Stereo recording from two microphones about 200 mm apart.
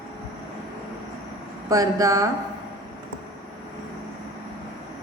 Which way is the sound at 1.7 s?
15° right (ahead or behind).